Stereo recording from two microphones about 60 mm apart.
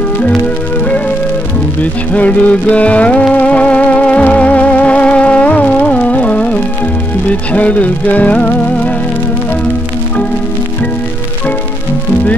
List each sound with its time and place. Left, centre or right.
1.8 s music: left